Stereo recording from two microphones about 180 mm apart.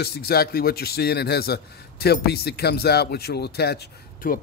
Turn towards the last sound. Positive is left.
turn(degrees=55)  # may be behind; listen again after turning